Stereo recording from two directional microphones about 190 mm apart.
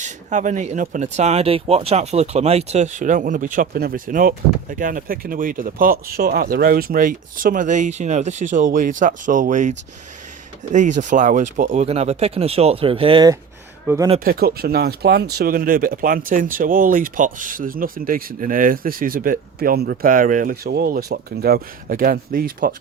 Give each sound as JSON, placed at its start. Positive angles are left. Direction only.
{"t": 0.0, "sound": "speech", "side_deg": -40}
{"t": 13.8, "sound": "speech", "side_deg": -15}
{"t": 14.3, "sound": "speech", "side_deg": -50}